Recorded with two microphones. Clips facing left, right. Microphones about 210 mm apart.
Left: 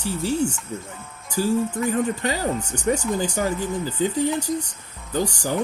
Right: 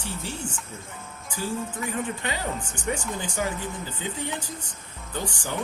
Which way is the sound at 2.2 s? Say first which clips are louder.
Left 7 dB; 40° left (ahead or behind).